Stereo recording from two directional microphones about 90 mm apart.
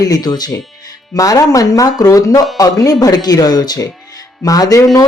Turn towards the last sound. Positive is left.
turn(degrees=40)  # may be behind; listen again after turning